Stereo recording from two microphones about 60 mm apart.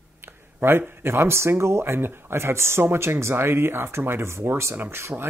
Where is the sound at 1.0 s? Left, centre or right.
Right.